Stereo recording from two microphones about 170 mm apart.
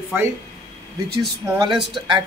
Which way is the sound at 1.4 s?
15° right (ahead or behind).